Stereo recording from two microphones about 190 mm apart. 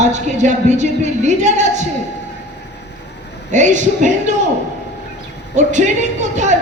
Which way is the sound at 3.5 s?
40° right (ahead or behind).